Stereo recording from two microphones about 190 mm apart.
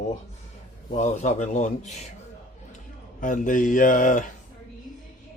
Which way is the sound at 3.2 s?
45° left (ahead or behind).